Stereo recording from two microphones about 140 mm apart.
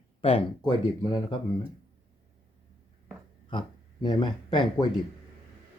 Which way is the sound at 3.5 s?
35° left (ahead or behind).